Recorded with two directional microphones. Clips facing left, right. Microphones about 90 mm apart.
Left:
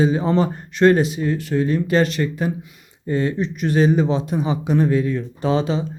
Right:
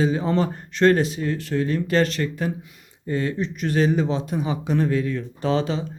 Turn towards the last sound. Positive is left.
turn(degrees=20)  # may be behind; listen again after turning